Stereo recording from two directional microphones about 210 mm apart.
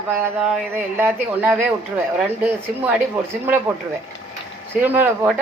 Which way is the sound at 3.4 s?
10° right (ahead or behind).